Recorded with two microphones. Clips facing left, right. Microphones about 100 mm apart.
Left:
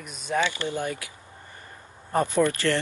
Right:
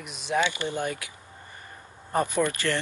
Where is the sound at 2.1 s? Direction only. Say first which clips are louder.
Left 3 dB; 15° right (ahead or behind).